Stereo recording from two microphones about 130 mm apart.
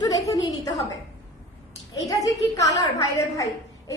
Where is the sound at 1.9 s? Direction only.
25° left (ahead or behind).